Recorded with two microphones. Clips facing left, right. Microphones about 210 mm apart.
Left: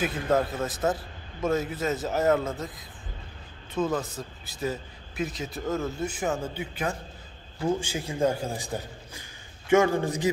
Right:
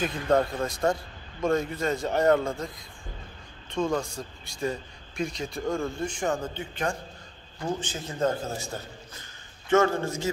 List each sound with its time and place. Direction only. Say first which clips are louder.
0.0 s speech: right 1 dB; 5° left (ahead or behind)
3.7 s a man's voice: even; 5° left (ahead or behind)